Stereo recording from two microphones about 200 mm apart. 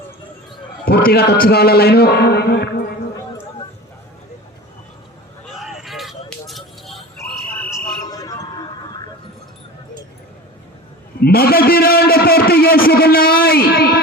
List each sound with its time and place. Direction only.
0.9 s a man's voice: 50° left (ahead or behind)
5.5 s a sound: centre (ahead or behind)
7.6 s music: 15° left (ahead or behind)
11.2 s a man's voice: 50° left (ahead or behind)